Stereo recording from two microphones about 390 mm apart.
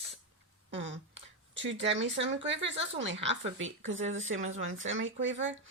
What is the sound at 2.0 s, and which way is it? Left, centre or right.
Speech, right.